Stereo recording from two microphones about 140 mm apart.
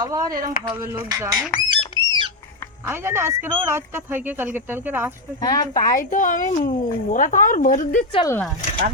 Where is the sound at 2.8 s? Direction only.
15° right (ahead or behind).